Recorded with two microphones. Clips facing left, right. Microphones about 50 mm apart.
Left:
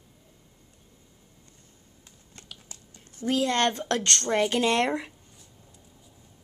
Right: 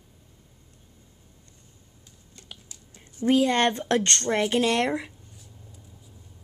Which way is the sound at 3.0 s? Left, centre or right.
Right.